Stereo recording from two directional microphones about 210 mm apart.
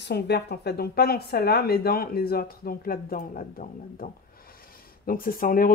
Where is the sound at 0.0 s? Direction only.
50° left (ahead or behind).